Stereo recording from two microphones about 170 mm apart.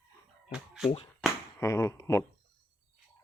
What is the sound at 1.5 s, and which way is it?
Speech, 15° left (ahead or behind).